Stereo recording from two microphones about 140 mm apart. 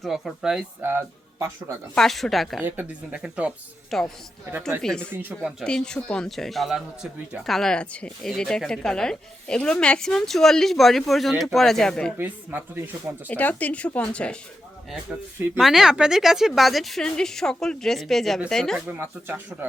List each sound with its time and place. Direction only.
0.0 s speech: centre (ahead or behind)
0.8 s speech: 15° right (ahead or behind)
2.0 s speech: centre (ahead or behind)
2.6 s speech: 10° right (ahead or behind)
3.9 s speech: centre (ahead or behind)
12.1 s speech: 15° right (ahead or behind)
13.2 s speech: 10° left (ahead or behind)
15.5 s speech: centre (ahead or behind)
18.9 s speech: 15° right (ahead or behind)